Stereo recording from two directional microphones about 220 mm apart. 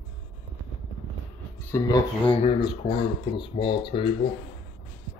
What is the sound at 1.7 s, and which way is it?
Speech, 15° left (ahead or behind).